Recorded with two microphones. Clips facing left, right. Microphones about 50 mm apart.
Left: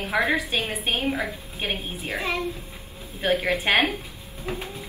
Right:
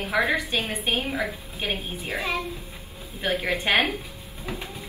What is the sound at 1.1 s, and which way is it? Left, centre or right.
Speech, centre.